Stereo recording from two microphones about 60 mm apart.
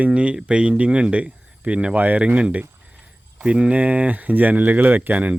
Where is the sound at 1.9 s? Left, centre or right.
Right.